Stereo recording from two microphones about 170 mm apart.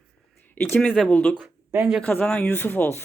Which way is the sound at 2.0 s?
10° left (ahead or behind).